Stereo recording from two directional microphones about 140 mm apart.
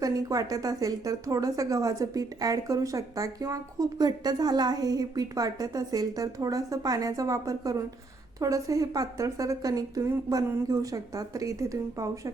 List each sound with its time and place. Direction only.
0.0 s a woman's voice: 25° right (ahead or behind)